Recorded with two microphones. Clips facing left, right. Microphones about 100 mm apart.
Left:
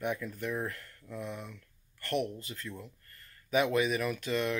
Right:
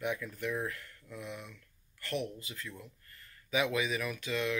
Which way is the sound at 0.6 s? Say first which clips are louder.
Left 1 dB; 40° left (ahead or behind).